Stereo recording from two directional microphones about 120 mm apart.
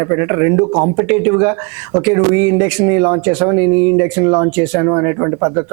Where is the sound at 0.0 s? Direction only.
25° right (ahead or behind).